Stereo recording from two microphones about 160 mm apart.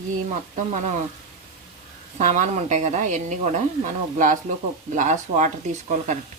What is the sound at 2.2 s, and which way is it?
A woman's voice, 50° right (ahead or behind).